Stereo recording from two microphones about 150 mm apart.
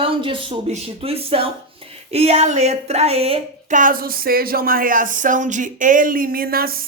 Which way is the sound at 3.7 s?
65° right (ahead or behind).